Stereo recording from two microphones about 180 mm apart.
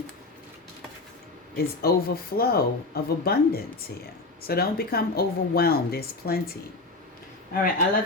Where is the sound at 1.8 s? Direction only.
55° left (ahead or behind).